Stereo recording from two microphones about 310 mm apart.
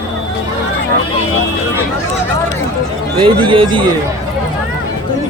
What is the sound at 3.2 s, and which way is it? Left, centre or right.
Speech, centre.